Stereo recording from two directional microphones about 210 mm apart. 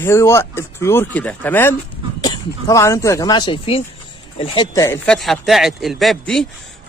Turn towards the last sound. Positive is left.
turn(degrees=0)  # may be behind; listen again after turning